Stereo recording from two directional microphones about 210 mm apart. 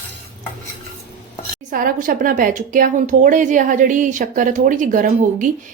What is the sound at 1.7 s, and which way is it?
A woman's voice, 40° right (ahead or behind).